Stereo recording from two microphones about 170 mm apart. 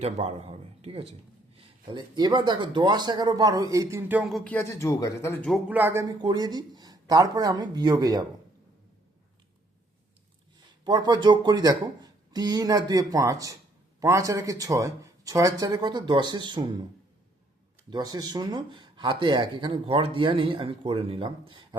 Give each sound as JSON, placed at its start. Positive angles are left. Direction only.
{"t": 0.0, "sound": "speech", "side_deg": -35}
{"t": 4.2, "sound": "speech", "side_deg": 0}
{"t": 4.5, "sound": "speech", "side_deg": 15}
{"t": 5.5, "sound": "speech", "side_deg": -10}
{"t": 10.8, "sound": "speech", "side_deg": -25}
{"t": 17.9, "sound": "speech", "side_deg": -25}